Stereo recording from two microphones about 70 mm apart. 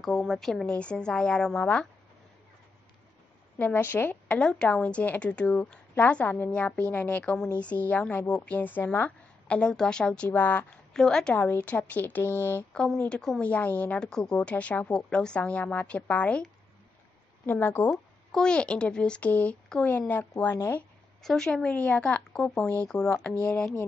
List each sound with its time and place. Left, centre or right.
0.0 s a woman's voice: centre
0.7 s speech: centre
3.7 s speech: left
4.3 s a woman's voice: centre; by 7.2 s left
7.4 s a woman's voice: left
9.5 s speech: centre
10.9 s speech: centre
11.3 s a woman's voice: left
12.7 s a woman's voice: centre
13.9 s speech: centre
17.5 s speech: left
18.3 s a woman's voice: centre
21.2 s speech: centre